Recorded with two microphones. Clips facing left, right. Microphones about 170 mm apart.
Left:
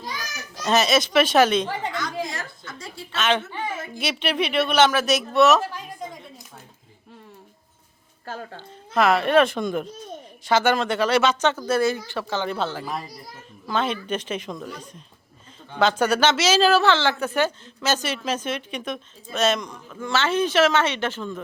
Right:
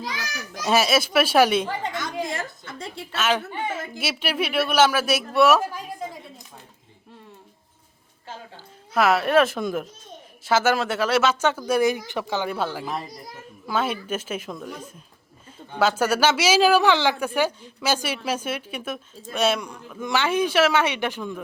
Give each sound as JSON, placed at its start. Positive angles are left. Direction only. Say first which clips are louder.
{"t": 0.0, "sound": "children playing", "louder": "right 2 dB", "side_deg": -90}
{"t": 0.6, "sound": "speech", "louder": "even", "side_deg": -10}
{"t": 2.3, "sound": "a woman's voice", "louder": "right 4 dB", "side_deg": -30}
{"t": 3.2, "sound": "speech", "louder": "left 1 dB", "side_deg": -5}
{"t": 8.9, "sound": "speech", "louder": "left 1 dB", "side_deg": -5}